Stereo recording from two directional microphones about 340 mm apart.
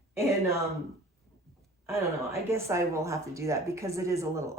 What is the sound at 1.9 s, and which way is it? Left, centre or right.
Speech, centre.